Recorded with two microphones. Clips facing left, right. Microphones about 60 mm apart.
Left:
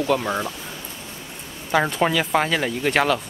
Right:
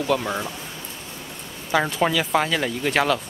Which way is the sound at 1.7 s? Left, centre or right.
Centre.